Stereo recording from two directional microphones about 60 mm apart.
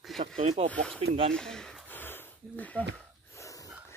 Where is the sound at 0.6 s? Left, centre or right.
Left.